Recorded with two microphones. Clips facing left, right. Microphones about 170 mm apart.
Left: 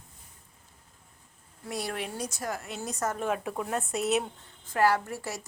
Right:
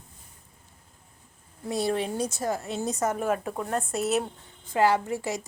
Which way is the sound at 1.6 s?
25° right (ahead or behind).